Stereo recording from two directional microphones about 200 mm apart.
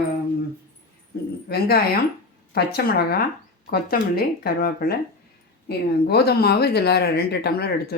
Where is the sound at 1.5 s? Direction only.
50° left (ahead or behind).